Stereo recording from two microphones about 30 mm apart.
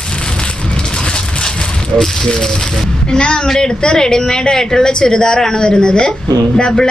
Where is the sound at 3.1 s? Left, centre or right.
Left.